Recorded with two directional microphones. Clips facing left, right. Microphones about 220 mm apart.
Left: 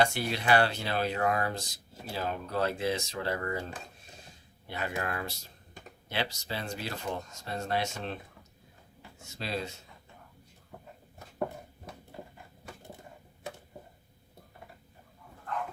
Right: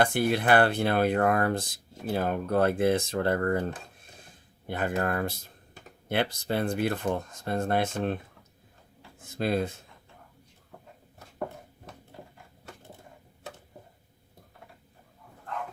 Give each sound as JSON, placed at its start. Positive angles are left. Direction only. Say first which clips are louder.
{"t": 0.0, "sound": "speech", "louder": "right 4 dB", "side_deg": -55}
{"t": 9.2, "sound": "speech", "louder": "right 8 dB", "side_deg": -50}